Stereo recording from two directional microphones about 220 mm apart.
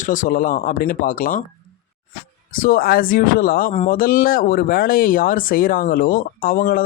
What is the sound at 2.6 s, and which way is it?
Speech, 40° left (ahead or behind).